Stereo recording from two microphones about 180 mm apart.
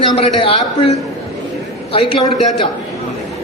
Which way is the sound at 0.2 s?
30° left (ahead or behind).